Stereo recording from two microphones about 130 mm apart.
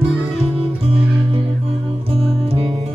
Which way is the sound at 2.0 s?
50° right (ahead or behind).